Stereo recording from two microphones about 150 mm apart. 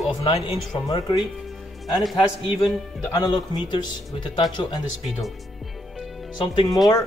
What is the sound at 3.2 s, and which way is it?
Speech, 25° left (ahead or behind).